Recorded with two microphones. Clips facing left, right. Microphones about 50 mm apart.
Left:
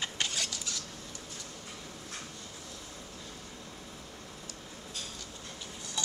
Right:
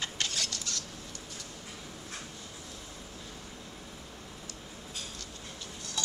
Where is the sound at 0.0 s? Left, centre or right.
Centre.